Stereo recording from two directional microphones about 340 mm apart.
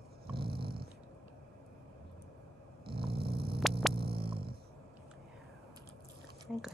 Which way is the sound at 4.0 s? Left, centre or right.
Centre.